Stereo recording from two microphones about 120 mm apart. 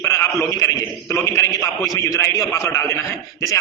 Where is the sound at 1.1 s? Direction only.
25° left (ahead or behind).